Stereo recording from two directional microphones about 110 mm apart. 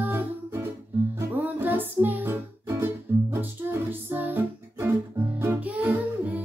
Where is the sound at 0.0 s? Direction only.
20° right (ahead or behind).